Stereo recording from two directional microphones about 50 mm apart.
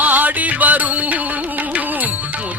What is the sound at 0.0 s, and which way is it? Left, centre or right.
Music, right.